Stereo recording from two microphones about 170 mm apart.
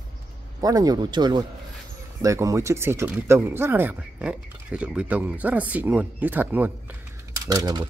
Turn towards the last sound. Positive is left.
turn(degrees=-20)  # may be behind; listen again after turning